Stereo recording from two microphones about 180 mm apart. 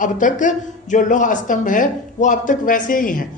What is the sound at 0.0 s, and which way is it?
Speech, 45° left (ahead or behind).